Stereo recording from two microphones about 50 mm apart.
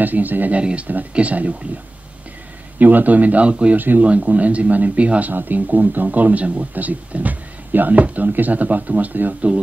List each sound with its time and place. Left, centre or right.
0.0 s a man's voice: right
0.6 s speech: right
2.8 s a man's voice: right
3.7 s a man's voice: right
5.3 s a man's voice: right